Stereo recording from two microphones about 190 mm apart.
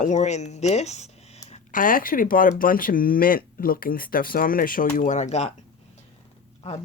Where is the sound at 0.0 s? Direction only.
40° left (ahead or behind).